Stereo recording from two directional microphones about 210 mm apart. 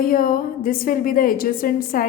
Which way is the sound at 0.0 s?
40° left (ahead or behind).